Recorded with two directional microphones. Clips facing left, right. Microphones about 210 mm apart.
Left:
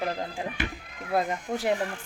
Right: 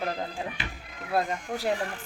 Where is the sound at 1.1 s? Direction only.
20° left (ahead or behind).